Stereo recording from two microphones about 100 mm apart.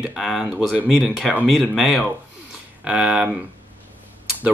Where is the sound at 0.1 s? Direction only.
5° right (ahead or behind).